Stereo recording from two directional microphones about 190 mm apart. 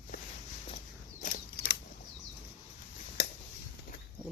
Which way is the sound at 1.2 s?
50° left (ahead or behind).